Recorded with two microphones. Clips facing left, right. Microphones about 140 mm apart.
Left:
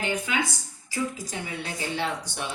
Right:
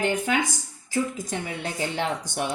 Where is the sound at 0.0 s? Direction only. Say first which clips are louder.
Right 4 dB; 50° right (ahead or behind).